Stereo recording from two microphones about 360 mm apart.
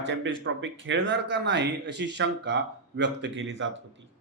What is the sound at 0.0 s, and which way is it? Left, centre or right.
Speech, right.